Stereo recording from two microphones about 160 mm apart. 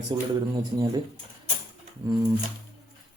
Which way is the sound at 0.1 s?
30° right (ahead or behind).